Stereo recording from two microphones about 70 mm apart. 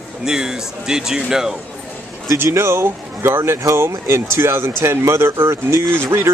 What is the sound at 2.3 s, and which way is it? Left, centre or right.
Speech, right.